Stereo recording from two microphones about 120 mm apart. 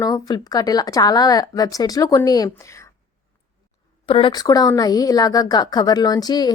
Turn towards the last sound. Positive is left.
turn(degrees=35)  # may be behind; listen again after turning